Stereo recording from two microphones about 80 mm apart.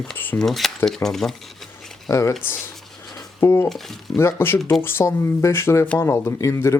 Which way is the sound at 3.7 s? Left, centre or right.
Centre.